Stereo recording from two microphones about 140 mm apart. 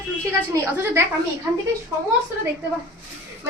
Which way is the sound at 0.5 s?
20° right (ahead or behind).